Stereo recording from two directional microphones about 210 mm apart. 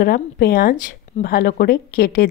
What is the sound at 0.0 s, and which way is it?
A woman's voice, 45° left (ahead or behind).